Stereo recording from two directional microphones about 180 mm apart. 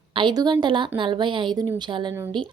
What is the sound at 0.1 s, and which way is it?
A woman's voice, 25° right (ahead or behind).